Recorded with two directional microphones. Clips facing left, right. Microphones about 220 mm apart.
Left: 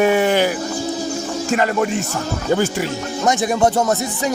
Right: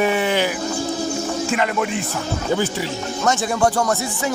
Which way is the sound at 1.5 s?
40° left (ahead or behind).